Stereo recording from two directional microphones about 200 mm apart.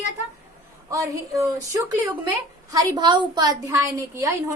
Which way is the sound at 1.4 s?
15° right (ahead or behind).